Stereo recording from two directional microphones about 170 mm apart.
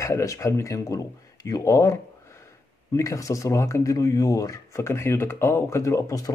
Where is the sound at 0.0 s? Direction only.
20° left (ahead or behind).